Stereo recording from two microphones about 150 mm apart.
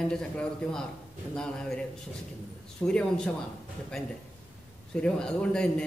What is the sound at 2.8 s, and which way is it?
Speech, 5° left (ahead or behind).